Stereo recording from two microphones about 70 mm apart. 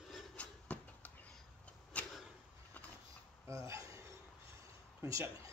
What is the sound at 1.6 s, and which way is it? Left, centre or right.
Vehicle, centre.